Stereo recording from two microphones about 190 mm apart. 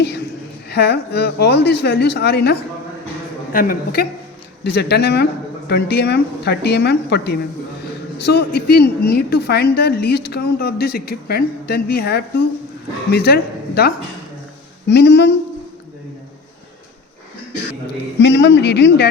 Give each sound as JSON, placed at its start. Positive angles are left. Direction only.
{"t": 0.7, "sound": "a woman's voice", "side_deg": 60}
{"t": 3.5, "sound": "a woman's voice", "side_deg": 50}
{"t": 4.6, "sound": "a woman's voice", "side_deg": 60}
{"t": 18.2, "sound": "a woman's voice", "side_deg": 65}